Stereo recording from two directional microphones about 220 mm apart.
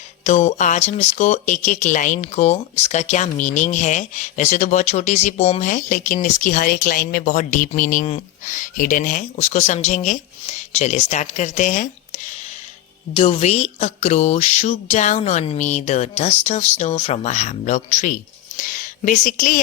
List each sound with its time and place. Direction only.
0.3 s speech: 30° left (ahead or behind)